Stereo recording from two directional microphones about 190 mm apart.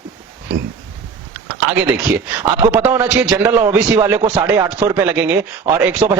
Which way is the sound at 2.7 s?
10° right (ahead or behind).